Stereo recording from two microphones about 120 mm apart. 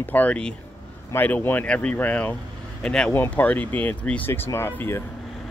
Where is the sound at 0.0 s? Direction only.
15° left (ahead or behind).